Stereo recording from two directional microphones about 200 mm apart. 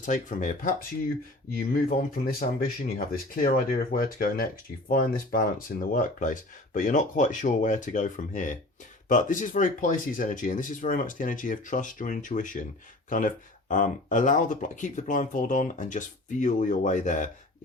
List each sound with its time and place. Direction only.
0.0 s speech: 40° left (ahead or behind)